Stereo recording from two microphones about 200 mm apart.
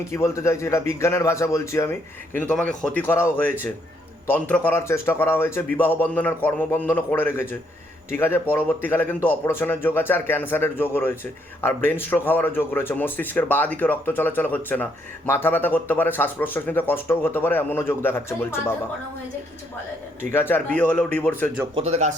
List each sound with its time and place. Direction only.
0.1 s a man's voice: 15° left (ahead or behind)
20.3 s a man's voice: 10° left (ahead or behind)
21.8 s speech: 35° right (ahead or behind)